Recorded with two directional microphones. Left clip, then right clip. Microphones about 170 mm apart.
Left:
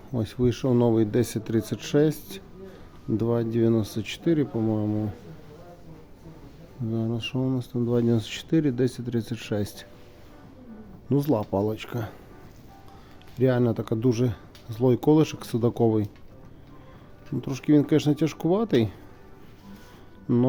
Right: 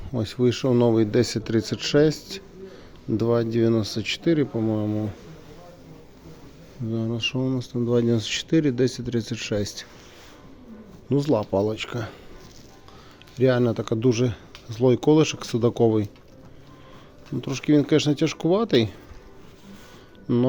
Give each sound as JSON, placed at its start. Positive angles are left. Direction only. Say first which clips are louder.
{"t": 0.1, "sound": "speech", "louder": "right 3 dB", "side_deg": 15}
{"t": 6.9, "sound": "speech", "louder": "right 4 dB", "side_deg": 10}
{"t": 11.1, "sound": "speech", "louder": "right 3 dB", "side_deg": 20}
{"t": 13.3, "sound": "speech", "louder": "right 3 dB", "side_deg": 15}
{"t": 17.4, "sound": "speech", "louder": "right 1 dB", "side_deg": 15}
{"t": 20.2, "sound": "speech", "louder": "right 1 dB", "side_deg": 25}